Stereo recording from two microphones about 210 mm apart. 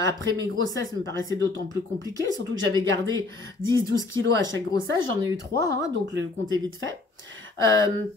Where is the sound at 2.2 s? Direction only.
65° right (ahead or behind).